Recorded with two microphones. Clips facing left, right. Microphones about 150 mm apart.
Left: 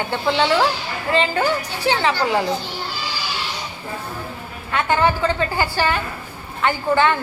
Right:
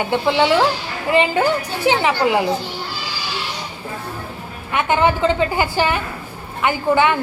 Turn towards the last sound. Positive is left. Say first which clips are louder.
# right 2 dB
turn(degrees=-15)  # may be behind; listen again after turning